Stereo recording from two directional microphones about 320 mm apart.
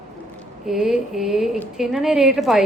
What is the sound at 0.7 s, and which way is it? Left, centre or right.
A woman's voice, centre.